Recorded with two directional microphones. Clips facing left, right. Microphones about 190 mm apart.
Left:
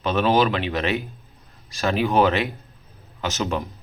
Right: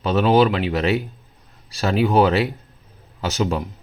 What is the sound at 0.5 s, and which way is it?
A man's voice, 35° right (ahead or behind).